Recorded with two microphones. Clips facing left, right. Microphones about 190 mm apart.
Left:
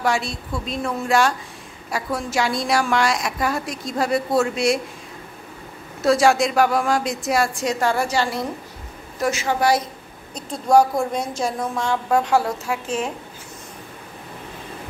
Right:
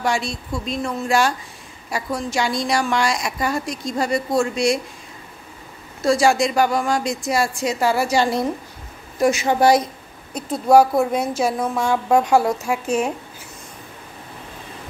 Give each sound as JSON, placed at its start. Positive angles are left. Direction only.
{"t": 0.0, "sound": "a woman's voice", "side_deg": 0}
{"t": 6.0, "sound": "a woman's voice", "side_deg": 0}
{"t": 9.2, "sound": "a woman's voice", "side_deg": -15}
{"t": 10.3, "sound": "a woman's voice", "side_deg": -5}